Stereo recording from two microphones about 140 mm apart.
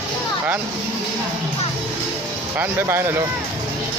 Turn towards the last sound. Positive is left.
turn(degrees=-15)  # may be behind; listen again after turning